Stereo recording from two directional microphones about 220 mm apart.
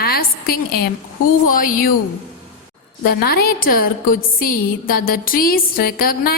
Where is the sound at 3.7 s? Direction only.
40° left (ahead or behind).